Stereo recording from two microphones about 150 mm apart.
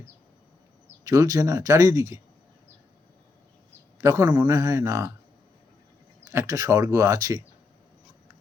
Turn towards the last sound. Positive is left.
turn(degrees=-25)  # may be behind; listen again after turning